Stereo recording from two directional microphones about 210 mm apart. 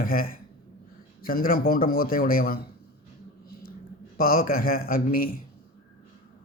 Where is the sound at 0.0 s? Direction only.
45° left (ahead or behind).